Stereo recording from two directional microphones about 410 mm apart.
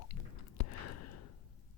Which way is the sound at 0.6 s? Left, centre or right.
Left.